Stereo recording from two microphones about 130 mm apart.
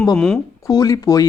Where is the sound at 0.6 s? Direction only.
25° left (ahead or behind).